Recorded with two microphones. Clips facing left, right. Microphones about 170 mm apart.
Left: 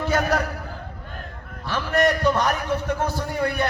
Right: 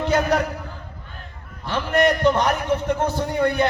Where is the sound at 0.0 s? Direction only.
20° right (ahead or behind).